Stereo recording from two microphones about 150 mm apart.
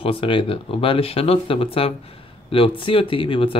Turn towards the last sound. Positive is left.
turn(degrees=35)  # may be behind; listen again after turning